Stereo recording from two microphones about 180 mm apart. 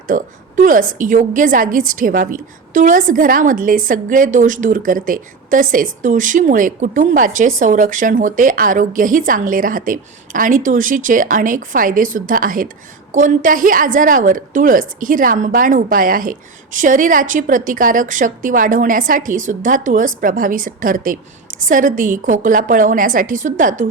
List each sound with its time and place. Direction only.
0.1 s a woman's voice: 50° right (ahead or behind)